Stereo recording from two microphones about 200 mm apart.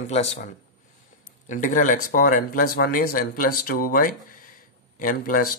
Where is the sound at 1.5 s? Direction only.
40° left (ahead or behind).